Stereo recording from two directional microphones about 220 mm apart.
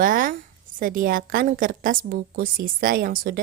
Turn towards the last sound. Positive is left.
turn(degrees=-40)  # may be behind; listen again after turning